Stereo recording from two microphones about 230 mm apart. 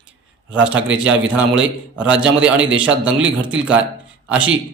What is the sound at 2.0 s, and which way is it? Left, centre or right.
A man's voice, centre.